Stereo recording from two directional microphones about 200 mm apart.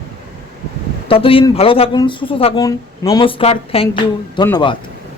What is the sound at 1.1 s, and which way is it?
A man's voice, 25° left (ahead or behind).